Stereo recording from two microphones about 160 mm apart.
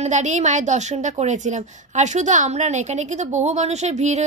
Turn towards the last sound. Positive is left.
turn(degrees=-45)  # may be behind; listen again after turning